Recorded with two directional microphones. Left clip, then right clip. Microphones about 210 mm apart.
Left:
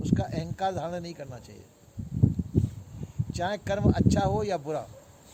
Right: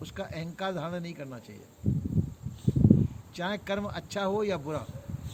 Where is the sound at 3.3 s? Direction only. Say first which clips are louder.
Left 3 dB; 40° left (ahead or behind).